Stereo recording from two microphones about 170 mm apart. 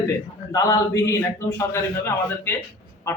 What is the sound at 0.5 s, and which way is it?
A man's voice, 20° left (ahead or behind).